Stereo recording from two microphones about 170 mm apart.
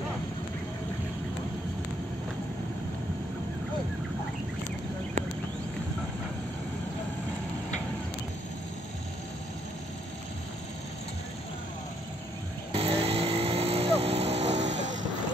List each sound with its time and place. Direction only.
12.7 s vehicle: 35° right (ahead or behind)